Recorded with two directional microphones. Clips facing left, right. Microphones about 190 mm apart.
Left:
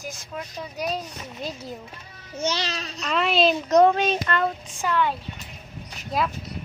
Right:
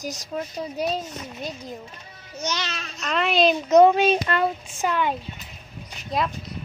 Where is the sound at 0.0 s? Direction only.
40° right (ahead or behind).